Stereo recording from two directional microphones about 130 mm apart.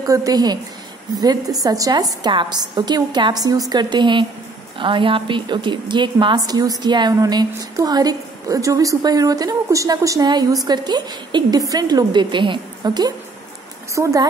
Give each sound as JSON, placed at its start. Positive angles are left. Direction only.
{"t": 0.0, "sound": "a woman's voice", "side_deg": -30}
{"t": 14.0, "sound": "a woman's voice", "side_deg": -25}